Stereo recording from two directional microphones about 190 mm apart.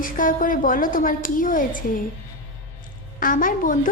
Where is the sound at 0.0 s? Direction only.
45° left (ahead or behind).